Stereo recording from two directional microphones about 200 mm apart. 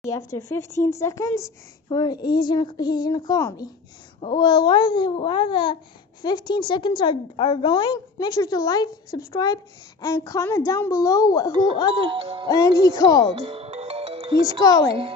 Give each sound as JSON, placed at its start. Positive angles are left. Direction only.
{"t": 0.0, "sound": "a woman's voice", "side_deg": 15}
{"t": 12.0, "sound": "music", "side_deg": -25}
{"t": 12.4, "sound": "speech", "side_deg": 15}
{"t": 13.3, "sound": "music", "side_deg": -30}
{"t": 14.6, "sound": "speech", "side_deg": 15}